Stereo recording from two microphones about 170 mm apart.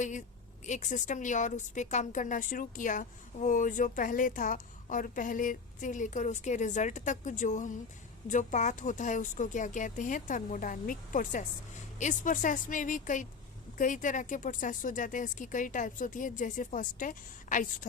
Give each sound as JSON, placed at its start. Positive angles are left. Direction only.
{"t": 0.0, "sound": "a woman's voice", "side_deg": 45}